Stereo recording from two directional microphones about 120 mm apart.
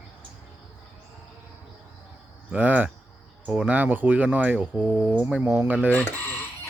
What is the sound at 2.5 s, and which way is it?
Speech, 15° right (ahead or behind).